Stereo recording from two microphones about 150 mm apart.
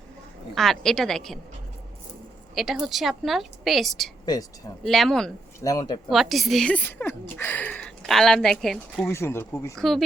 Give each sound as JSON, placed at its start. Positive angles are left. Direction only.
{"t": 0.5, "sound": "speech", "side_deg": 0}
{"t": 2.6, "sound": "speech", "side_deg": 0}
{"t": 5.6, "sound": "speech", "side_deg": 25}
{"t": 6.1, "sound": "speech", "side_deg": 0}
{"t": 9.0, "sound": "speech", "side_deg": 15}
{"t": 9.7, "sound": "speech", "side_deg": 0}